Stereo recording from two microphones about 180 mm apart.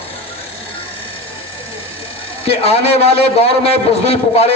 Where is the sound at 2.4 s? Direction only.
35° left (ahead or behind).